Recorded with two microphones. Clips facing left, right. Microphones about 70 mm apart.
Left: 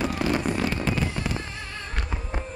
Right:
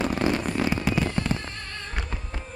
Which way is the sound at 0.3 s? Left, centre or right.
Centre.